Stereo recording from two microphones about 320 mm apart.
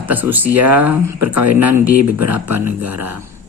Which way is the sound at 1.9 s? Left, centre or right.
Right.